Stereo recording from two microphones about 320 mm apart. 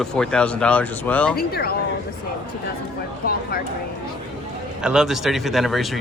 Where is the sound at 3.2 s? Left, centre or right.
Left.